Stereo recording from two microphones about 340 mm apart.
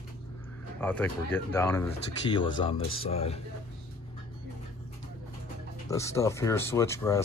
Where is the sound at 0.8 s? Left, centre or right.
Centre.